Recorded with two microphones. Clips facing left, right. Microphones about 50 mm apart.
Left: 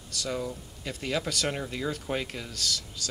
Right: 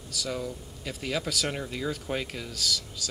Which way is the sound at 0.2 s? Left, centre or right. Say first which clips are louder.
Left 1 dB; centre.